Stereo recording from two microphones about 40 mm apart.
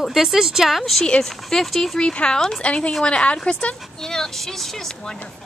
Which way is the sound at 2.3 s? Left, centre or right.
Centre.